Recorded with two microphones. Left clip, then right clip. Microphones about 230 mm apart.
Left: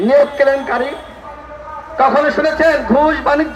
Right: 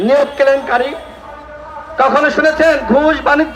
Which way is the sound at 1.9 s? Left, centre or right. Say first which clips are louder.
Right 1 dB; right.